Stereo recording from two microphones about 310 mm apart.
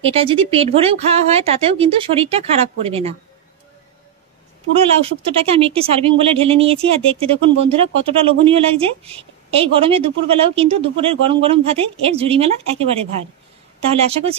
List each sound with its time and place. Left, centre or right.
0.0 s speech: centre
5.0 s speech: centre
13.8 s speech: centre